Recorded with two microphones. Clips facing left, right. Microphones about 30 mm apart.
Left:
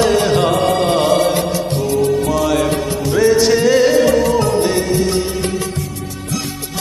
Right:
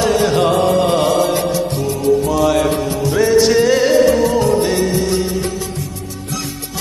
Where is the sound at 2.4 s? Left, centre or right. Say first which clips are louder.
Right 1 dB; centre.